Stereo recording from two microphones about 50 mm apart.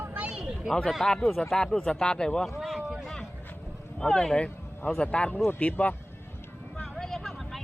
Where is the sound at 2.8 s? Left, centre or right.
Right.